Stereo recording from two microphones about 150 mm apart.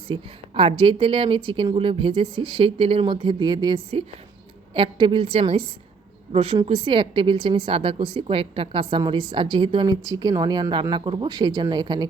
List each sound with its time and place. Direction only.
0.1 s a woman's voice: 40° right (ahead or behind)